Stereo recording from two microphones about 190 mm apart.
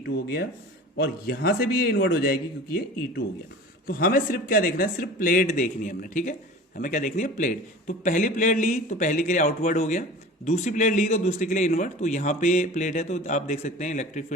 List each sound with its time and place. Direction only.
0.9 s a man's voice: 55° left (ahead or behind)
3.8 s a man's voice: 50° left (ahead or behind)